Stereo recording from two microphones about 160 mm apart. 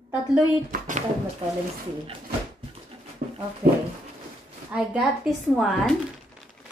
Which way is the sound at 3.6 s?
65° right (ahead or behind).